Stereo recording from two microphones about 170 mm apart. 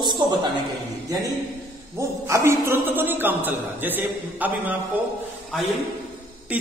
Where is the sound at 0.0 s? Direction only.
25° right (ahead or behind).